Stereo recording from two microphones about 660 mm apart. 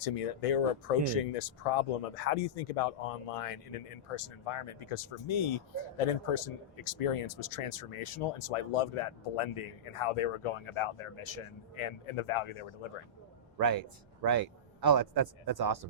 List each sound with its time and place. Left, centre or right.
0.0 s speech: left
14.2 s speech: right